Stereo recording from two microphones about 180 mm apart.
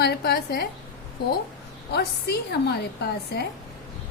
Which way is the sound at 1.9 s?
65° left (ahead or behind).